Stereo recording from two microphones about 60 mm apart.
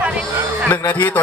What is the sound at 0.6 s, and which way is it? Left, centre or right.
Speech, left.